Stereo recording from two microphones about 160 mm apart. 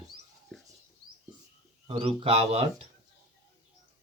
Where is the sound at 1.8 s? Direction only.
35° right (ahead or behind).